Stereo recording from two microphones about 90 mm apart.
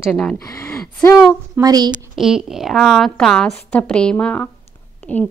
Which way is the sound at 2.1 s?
5° right (ahead or behind).